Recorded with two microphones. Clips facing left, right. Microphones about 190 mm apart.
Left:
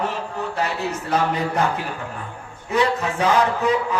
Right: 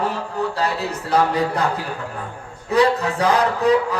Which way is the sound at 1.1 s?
35° right (ahead or behind).